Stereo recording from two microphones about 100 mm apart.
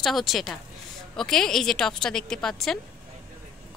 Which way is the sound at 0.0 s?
Centre (ahead or behind).